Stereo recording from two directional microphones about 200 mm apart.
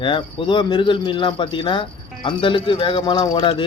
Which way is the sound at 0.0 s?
25° left (ahead or behind).